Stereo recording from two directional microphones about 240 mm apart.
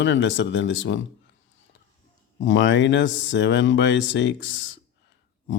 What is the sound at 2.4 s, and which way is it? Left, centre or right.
Speech, left.